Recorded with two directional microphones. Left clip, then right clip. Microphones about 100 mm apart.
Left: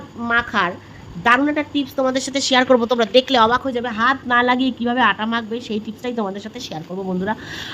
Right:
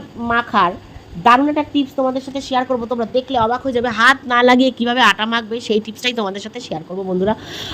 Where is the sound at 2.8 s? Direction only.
30° left (ahead or behind).